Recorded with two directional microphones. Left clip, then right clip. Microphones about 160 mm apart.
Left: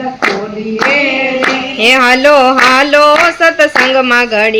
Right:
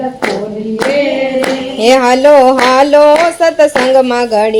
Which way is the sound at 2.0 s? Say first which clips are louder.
Right 2 dB; 50° right (ahead or behind).